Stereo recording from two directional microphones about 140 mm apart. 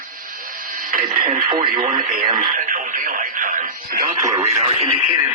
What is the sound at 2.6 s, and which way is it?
Radio, 90° right.